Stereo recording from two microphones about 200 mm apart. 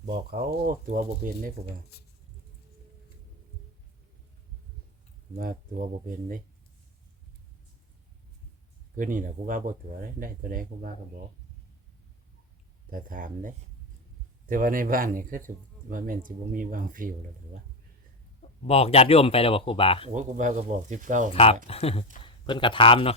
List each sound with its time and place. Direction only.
0.1 s speech: 50° right (ahead or behind)
1.9 s speech: 50° left (ahead or behind)
5.4 s speech: 45° right (ahead or behind)
9.0 s speech: 40° right (ahead or behind)
12.9 s speech: 45° right (ahead or behind)
18.6 s speech: 30° left (ahead or behind)
20.1 s speech: 40° right (ahead or behind)
21.3 s speech: 30° left (ahead or behind)